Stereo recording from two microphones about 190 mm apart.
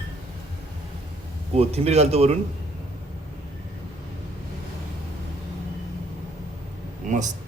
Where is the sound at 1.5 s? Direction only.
35° right (ahead or behind).